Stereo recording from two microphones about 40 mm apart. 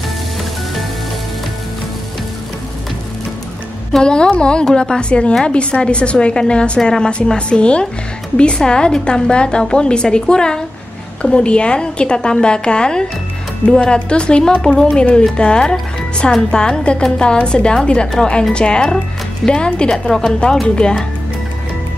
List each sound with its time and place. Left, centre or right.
3.9 s a woman's voice: left
18.0 s speech: centre
18.5 s a woman's voice: left